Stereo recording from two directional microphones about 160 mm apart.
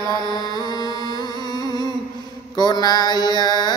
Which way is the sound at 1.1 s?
25° left (ahead or behind).